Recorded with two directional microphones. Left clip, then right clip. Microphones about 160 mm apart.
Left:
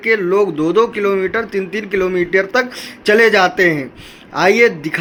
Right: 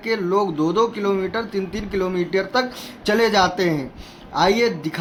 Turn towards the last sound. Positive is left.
turn(degrees=5)  # may be behind; listen again after turning